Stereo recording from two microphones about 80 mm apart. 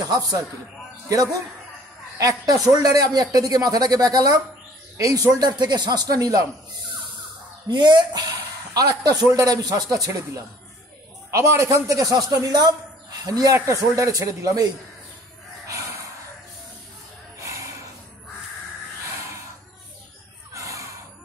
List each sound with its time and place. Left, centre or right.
1.0 s speech: right
7.7 s speech: right
8.7 s speech: right
11.2 s a man's voice: right
17.4 s jingle bell: right
20.5 s a sound: right